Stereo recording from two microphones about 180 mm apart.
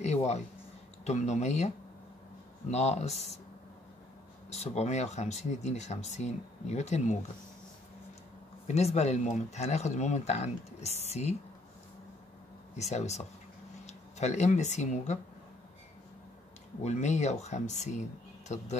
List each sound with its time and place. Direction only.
0.0 s speech: 40° left (ahead or behind)
2.7 s speech: 40° left (ahead or behind)
4.5 s speech: 35° left (ahead or behind)
8.6 s speech: 35° left (ahead or behind)
12.7 s speech: 40° left (ahead or behind)
16.8 s speech: 40° left (ahead or behind)